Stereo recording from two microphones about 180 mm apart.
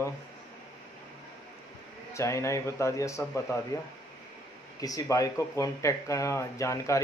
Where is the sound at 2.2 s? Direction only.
15° left (ahead or behind).